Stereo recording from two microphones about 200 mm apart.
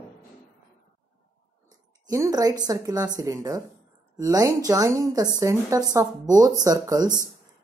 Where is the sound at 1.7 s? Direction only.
15° right (ahead or behind).